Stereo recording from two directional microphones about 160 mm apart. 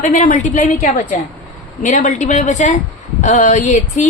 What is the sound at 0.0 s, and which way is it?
A woman's voice, 55° left (ahead or behind).